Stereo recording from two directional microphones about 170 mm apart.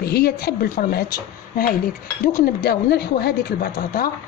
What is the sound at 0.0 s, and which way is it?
Speech, 70° left (ahead or behind).